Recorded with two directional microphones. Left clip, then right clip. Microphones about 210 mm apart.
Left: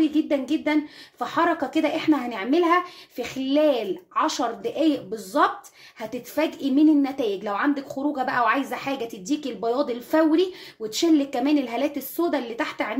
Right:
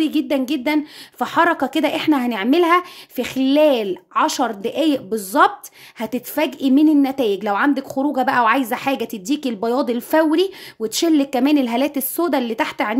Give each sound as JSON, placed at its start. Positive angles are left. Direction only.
{"t": 0.0, "sound": "a woman's voice", "side_deg": -50}